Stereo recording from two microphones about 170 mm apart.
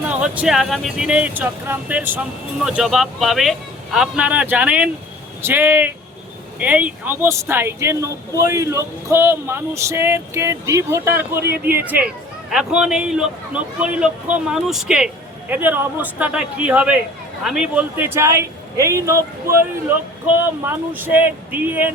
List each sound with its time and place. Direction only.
0.1 s a man's voice: 5° right (ahead or behind)